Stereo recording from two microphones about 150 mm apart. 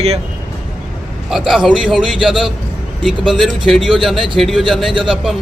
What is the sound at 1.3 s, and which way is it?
A man's voice, centre (ahead or behind).